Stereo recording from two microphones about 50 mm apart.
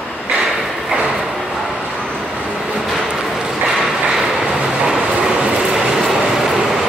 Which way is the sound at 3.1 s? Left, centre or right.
Centre.